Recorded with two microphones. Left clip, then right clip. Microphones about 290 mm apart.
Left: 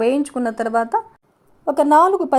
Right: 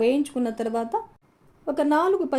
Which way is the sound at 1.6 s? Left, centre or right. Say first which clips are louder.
Left 8 dB; left.